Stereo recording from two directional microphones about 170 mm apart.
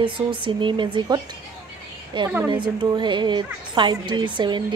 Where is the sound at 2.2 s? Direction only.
15° right (ahead or behind).